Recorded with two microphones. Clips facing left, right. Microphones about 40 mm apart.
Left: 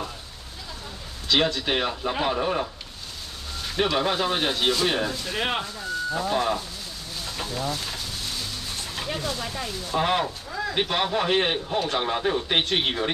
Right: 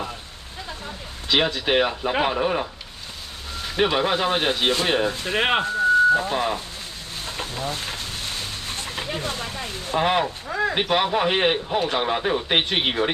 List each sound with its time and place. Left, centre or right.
1.3 s a man's voice: centre
5.1 s speech: right
6.1 s a man's voice: right
7.2 s a sound: right
8.9 s a sound: centre
9.2 s speech: right
9.9 s a man's voice: centre
10.5 s speech: right
10.8 s a man's voice: centre